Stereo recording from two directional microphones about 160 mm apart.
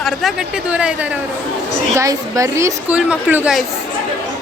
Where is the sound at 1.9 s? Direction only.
20° right (ahead or behind).